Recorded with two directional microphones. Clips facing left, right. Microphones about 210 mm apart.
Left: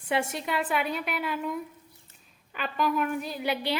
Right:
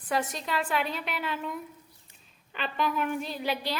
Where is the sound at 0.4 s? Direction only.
5° left (ahead or behind).